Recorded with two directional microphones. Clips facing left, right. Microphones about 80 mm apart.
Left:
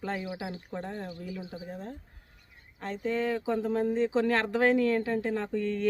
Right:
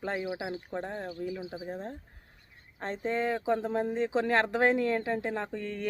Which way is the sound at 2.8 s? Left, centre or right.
Right.